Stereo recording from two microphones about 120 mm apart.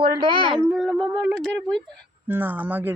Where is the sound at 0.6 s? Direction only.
Centre (ahead or behind).